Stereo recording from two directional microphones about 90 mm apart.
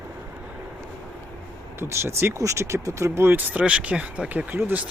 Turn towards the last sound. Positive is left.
turn(degrees=-20)  # may be behind; listen again after turning